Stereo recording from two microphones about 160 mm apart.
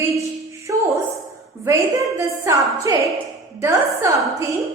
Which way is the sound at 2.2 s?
20° right (ahead or behind).